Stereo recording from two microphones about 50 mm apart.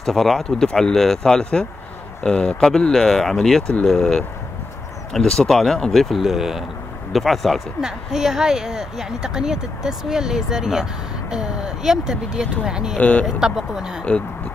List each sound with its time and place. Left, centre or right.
0.0 s speech: centre
6.2 s speech: centre
7.1 s speech: centre
7.8 s speech: centre